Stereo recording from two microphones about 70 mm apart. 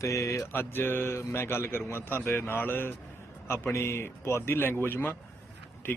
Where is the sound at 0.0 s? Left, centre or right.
Left.